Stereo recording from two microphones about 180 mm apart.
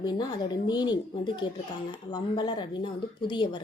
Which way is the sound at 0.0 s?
25° left (ahead or behind).